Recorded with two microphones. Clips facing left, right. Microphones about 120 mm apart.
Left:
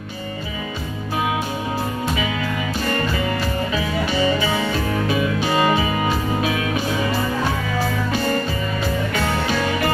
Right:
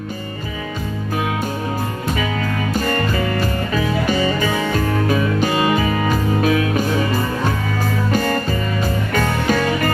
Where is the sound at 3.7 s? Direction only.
45° right (ahead or behind).